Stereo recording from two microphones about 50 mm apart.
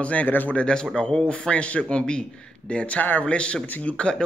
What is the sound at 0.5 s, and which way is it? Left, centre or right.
A man's voice, centre.